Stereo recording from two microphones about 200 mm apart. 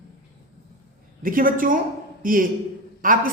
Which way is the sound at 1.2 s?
45° right (ahead or behind).